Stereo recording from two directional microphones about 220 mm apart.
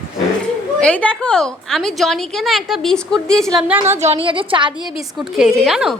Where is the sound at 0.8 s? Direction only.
5° left (ahead or behind).